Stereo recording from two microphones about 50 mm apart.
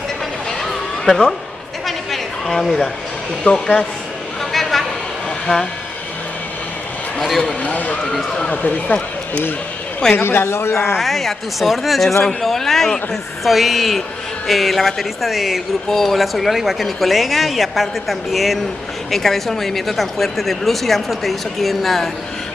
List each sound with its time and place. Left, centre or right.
0.5 s a sound: centre
1.9 s chatter: centre
3.5 s a man's voice: centre
4.5 s a sound: centre
7.2 s a man's voice: centre
7.6 s speech: left
10.1 s a man's voice: left
11.0 s a man's voice: centre